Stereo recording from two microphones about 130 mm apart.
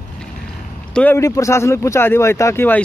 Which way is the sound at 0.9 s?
10° left (ahead or behind).